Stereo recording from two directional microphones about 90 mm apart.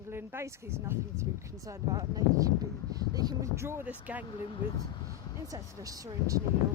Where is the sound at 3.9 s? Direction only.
15° right (ahead or behind).